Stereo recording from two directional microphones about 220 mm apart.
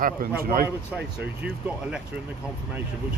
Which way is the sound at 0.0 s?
40° right (ahead or behind).